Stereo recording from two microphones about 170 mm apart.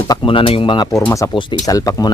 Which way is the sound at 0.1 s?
30° left (ahead or behind).